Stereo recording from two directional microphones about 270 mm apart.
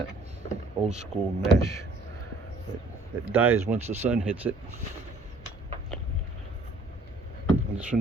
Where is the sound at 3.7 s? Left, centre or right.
Right.